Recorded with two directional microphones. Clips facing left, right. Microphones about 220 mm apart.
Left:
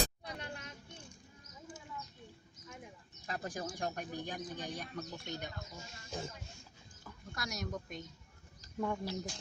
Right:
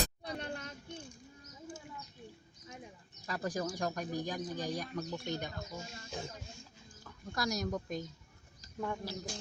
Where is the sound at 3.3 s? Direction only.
40° right (ahead or behind).